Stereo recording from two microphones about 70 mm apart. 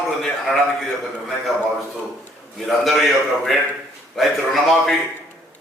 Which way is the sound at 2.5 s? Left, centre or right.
Centre.